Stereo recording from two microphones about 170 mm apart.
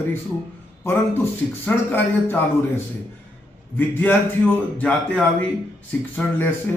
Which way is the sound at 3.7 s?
10° left (ahead or behind).